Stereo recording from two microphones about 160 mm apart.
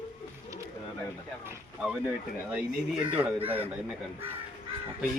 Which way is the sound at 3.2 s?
10° right (ahead or behind).